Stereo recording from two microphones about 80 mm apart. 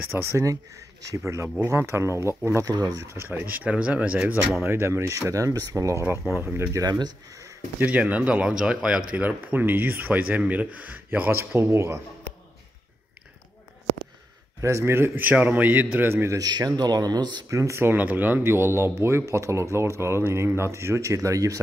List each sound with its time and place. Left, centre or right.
0.1 s speech: right
2.6 s speech: right
3.3 s speech: right
4.6 s speech: right
6.3 s a man's voice: right
6.7 s speech: right
7.8 s speech: centre
9.1 s a man's voice: right
14.6 s a man's voice: right
16.3 s speech: right
17.5 s speech: right
17.9 s speech: right